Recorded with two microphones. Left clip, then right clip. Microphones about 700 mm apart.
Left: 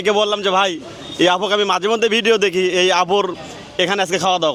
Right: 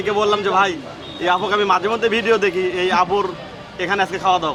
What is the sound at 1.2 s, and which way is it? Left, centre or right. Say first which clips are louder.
A man's voice: left 2 dB; left.